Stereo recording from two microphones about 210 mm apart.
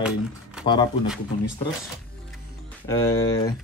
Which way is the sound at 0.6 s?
20° left (ahead or behind).